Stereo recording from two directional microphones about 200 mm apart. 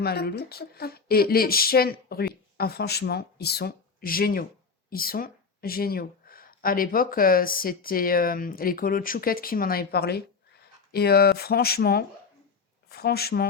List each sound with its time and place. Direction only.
0.0 s speech: 50° left (ahead or behind)